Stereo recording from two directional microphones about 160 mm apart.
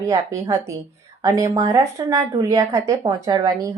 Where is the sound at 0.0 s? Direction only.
20° right (ahead or behind).